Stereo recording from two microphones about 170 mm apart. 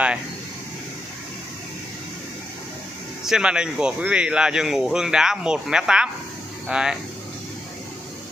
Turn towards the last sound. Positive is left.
turn(degrees=-5)  # may be behind; listen again after turning